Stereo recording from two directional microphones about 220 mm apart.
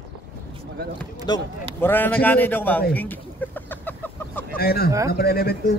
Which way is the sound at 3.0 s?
10° left (ahead or behind).